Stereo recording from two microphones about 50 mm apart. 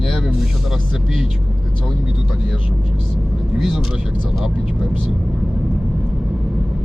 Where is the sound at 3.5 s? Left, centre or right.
Centre.